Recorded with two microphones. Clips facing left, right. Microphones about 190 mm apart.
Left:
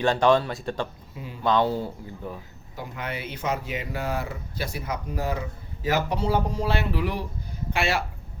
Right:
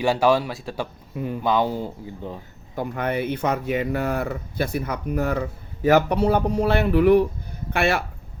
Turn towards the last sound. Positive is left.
turn(degrees=-55)  # may be behind; listen again after turning